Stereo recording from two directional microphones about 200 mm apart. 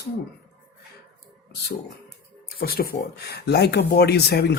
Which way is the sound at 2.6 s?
50° left (ahead or behind).